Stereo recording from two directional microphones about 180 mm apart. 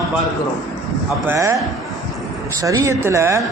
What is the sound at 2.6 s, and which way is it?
Speech, 15° right (ahead or behind).